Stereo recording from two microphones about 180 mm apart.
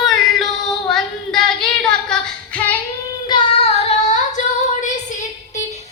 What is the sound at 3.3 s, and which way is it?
Child singing, 30° left (ahead or behind).